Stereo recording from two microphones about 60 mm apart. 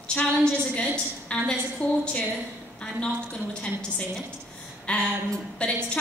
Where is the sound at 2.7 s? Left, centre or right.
Centre.